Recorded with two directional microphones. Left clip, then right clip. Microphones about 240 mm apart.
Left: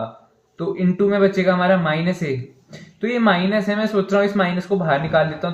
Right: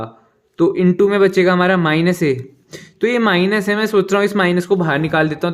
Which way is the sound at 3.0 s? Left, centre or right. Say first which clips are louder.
Right 3 dB; right.